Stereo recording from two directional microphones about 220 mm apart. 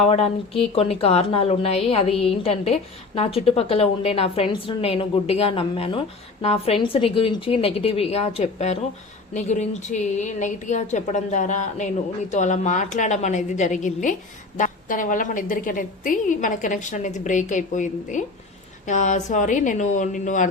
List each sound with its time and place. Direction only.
0.0 s a woman's voice: 25° left (ahead or behind)